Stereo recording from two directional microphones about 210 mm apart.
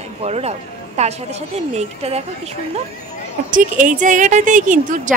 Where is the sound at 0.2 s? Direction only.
30° right (ahead or behind).